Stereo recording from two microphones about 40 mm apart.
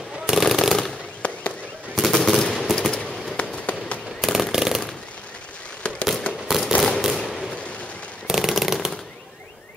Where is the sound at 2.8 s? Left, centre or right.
Centre.